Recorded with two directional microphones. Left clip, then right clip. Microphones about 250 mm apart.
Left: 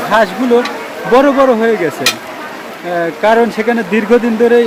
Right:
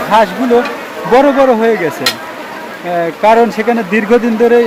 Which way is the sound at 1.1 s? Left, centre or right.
Centre.